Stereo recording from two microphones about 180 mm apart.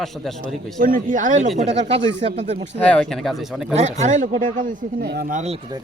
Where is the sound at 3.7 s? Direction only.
40° right (ahead or behind).